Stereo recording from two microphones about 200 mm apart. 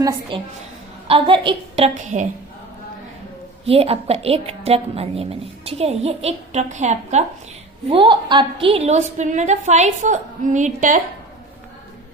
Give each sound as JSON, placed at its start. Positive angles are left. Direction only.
{"t": 0.0, "sound": "a woman's voice", "side_deg": -25}
{"t": 3.7, "sound": "a woman's voice", "side_deg": -30}